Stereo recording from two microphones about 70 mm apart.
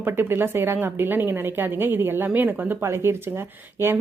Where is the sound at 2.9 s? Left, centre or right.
Right.